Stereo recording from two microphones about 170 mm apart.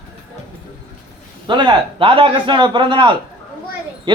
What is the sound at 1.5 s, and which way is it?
A man's voice, 30° right (ahead or behind).